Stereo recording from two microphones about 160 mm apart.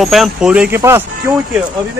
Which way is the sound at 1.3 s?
Centre (ahead or behind).